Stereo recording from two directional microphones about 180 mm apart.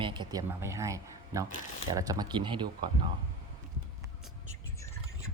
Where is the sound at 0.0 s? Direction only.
25° right (ahead or behind).